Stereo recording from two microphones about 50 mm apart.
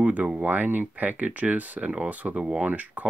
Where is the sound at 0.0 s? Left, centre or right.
Right.